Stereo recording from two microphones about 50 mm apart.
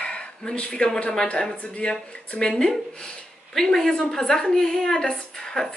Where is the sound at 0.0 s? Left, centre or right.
Left.